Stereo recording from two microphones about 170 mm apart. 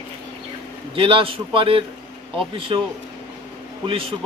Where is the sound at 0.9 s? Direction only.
30° right (ahead or behind).